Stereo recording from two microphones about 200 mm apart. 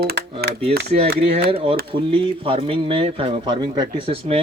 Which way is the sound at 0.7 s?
55° right (ahead or behind).